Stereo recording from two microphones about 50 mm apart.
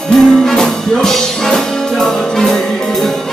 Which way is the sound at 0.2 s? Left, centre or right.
Centre.